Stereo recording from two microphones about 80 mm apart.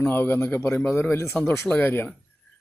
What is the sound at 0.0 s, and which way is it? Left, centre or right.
Speech, left.